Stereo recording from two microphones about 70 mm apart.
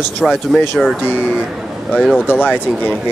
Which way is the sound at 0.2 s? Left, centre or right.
Centre.